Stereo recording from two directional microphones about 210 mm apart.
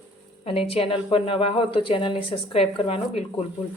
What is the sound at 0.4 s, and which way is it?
Speech, 30° left (ahead or behind).